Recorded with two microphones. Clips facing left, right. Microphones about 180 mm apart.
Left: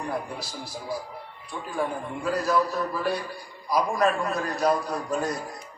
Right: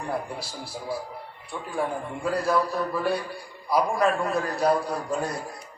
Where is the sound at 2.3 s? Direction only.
30° right (ahead or behind).